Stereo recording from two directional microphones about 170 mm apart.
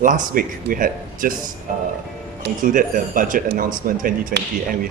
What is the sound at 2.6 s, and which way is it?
Speech, 50° right (ahead or behind).